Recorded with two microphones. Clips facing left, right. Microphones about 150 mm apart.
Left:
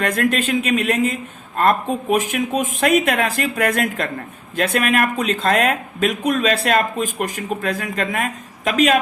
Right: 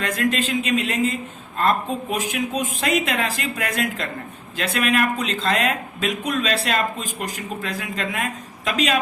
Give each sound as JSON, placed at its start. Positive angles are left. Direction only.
{"t": 0.0, "sound": "speech", "side_deg": 50}